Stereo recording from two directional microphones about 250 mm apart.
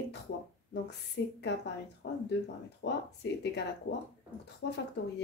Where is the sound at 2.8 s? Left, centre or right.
Left.